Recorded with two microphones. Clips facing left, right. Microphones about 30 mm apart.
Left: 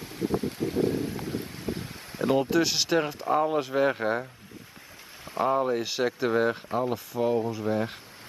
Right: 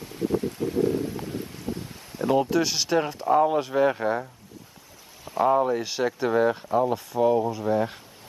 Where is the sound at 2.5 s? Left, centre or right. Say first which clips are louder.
Right 1 dB; centre.